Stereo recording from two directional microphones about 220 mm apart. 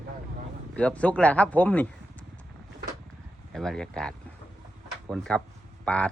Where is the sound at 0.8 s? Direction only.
5° left (ahead or behind).